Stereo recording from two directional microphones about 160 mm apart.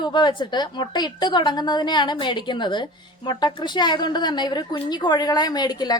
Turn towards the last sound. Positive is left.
turn(degrees=25)  # may be behind; listen again after turning